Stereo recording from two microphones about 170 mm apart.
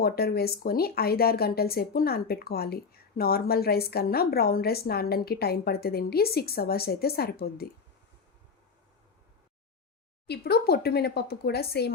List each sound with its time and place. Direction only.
0.0 s speech: 65° left (ahead or behind)
10.2 s speech: 70° left (ahead or behind)